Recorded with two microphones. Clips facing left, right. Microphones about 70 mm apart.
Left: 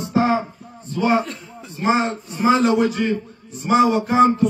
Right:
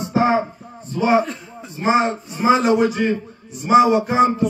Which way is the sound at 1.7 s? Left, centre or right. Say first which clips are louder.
Right 2 dB; centre.